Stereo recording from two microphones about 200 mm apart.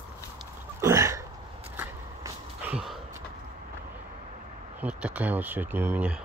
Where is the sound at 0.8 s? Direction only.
15° right (ahead or behind).